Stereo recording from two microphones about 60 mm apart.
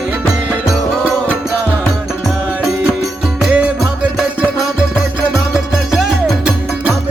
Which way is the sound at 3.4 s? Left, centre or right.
Centre.